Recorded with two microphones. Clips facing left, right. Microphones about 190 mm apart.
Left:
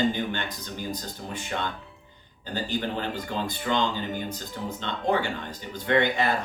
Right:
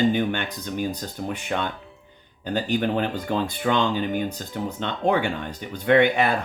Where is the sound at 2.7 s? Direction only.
60° right (ahead or behind).